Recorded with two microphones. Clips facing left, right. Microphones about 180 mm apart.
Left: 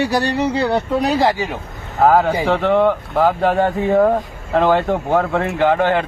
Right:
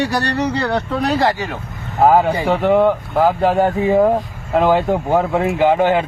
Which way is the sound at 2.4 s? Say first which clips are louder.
Right 1 dB; 15° right (ahead or behind).